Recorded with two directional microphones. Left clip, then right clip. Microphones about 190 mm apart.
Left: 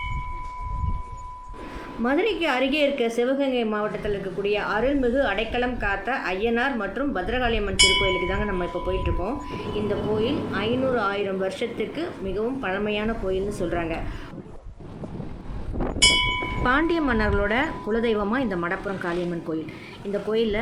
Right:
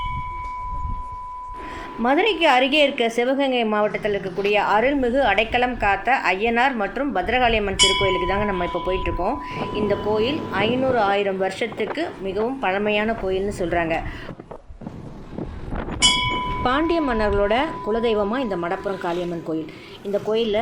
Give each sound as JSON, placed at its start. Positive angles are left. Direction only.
{"t": 2.0, "sound": "a woman's voice", "side_deg": -20}
{"t": 16.6, "sound": "speech", "side_deg": 0}